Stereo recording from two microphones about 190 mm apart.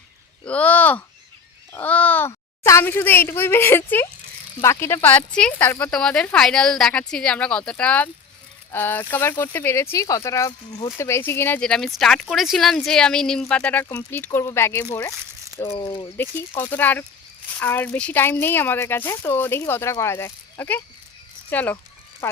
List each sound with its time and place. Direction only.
0.4 s a child's voice: 5° left (ahead or behind)
15.6 s speech: 30° left (ahead or behind)
15.9 s speech: 15° left (ahead or behind)